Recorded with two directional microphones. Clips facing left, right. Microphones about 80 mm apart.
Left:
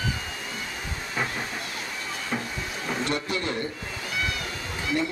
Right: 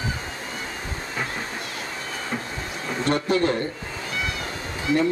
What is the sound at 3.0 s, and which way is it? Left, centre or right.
Speech, right.